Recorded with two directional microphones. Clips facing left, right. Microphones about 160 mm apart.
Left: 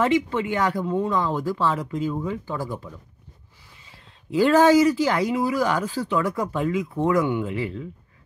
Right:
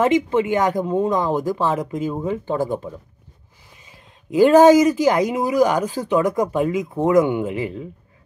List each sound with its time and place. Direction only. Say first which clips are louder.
0.0 s speech: right 4 dB; 20° right (ahead or behind)
3.8 s speech: right 2 dB; 15° right (ahead or behind)